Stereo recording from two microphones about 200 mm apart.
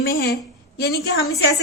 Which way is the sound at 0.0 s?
50° left (ahead or behind).